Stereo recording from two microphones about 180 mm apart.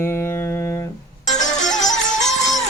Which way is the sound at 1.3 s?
45° left (ahead or behind).